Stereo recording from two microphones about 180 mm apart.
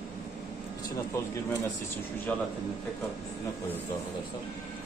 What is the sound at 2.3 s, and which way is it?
Speech, 10° left (ahead or behind).